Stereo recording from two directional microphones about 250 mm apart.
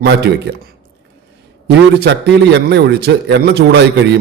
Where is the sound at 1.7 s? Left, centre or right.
Right.